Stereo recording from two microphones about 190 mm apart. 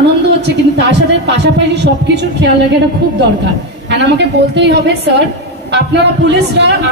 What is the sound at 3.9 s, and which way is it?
A man's voice, 65° right (ahead or behind).